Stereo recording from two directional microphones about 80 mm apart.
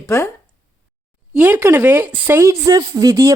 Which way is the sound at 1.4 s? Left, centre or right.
Right.